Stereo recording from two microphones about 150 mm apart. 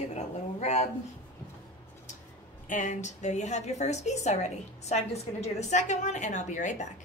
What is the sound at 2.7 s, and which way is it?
A woman's voice, 55° left (ahead or behind).